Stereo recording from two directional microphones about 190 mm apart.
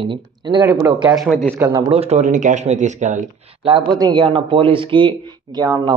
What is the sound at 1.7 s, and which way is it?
Speech, 25° right (ahead or behind).